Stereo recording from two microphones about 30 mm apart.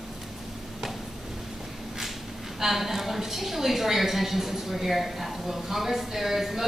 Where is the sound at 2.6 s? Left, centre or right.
Centre.